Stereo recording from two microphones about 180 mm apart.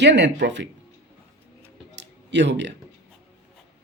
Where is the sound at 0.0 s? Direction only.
75° right (ahead or behind).